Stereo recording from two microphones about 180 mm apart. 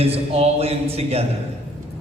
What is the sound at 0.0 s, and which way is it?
A man's voice, 35° right (ahead or behind).